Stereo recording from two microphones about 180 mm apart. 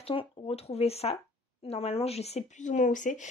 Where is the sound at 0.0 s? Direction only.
30° left (ahead or behind).